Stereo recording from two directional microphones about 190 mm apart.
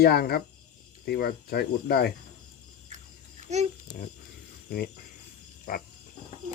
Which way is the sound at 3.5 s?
35° right (ahead or behind).